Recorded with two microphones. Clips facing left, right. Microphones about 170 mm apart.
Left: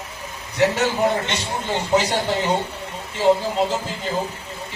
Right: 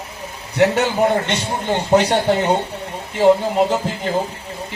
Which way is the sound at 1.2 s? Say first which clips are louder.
Right 4 dB; 60° right (ahead or behind).